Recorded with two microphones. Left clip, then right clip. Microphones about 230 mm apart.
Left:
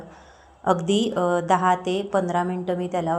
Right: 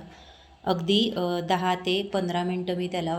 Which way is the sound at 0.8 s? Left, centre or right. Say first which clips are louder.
Left 1 dB; left.